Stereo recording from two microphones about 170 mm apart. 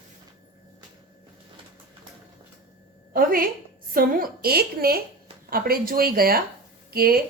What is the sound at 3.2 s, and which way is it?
A woman's voice, 55° right (ahead or behind).